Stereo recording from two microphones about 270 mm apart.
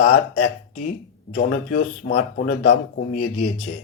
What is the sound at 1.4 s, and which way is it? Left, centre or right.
A man's voice, left.